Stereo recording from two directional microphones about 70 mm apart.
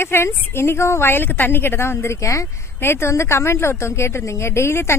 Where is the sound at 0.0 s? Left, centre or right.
Left.